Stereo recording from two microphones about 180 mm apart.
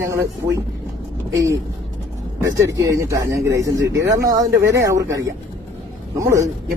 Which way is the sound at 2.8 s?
15° right (ahead or behind).